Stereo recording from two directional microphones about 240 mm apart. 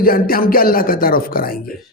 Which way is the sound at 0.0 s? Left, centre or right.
Left.